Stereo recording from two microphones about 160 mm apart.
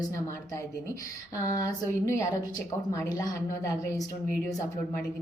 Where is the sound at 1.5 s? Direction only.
20° left (ahead or behind).